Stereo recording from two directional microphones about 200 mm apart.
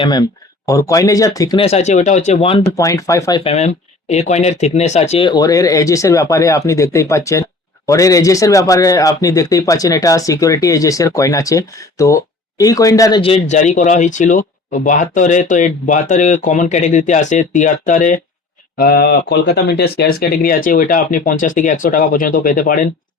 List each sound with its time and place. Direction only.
0.0 s speech: 20° left (ahead or behind)
1.6 s speech: 35° left (ahead or behind)
2.7 s speech: 15° left (ahead or behind)
3.4 s speech: 30° left (ahead or behind)
18.8 s speech: 50° left (ahead or behind)